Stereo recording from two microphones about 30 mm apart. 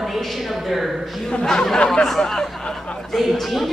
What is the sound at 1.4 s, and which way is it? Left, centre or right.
Speech, centre.